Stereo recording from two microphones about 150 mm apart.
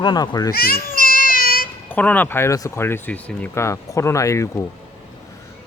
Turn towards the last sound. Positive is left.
turn(degrees=20)  # may be behind; listen again after turning